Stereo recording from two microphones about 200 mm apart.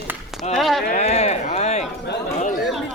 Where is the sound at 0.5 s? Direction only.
Centre (ahead or behind).